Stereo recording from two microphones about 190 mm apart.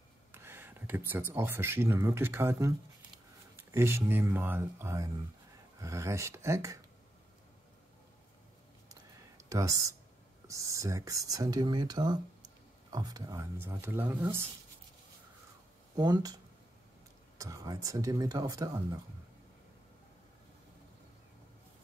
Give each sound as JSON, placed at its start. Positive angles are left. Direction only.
{"t": 0.3, "sound": "speech", "side_deg": -10}
{"t": 9.5, "sound": "speech", "side_deg": -15}
{"t": 16.0, "sound": "speech", "side_deg": -20}
{"t": 17.4, "sound": "speech", "side_deg": -15}